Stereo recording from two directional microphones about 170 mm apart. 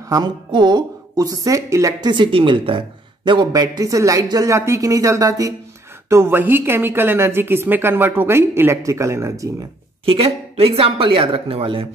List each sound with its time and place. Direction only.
0.1 s a woman's voice: 25° right (ahead or behind)
10.0 s speech: 35° right (ahead or behind)